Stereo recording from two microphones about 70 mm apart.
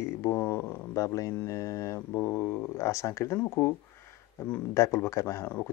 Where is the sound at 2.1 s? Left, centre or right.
Left.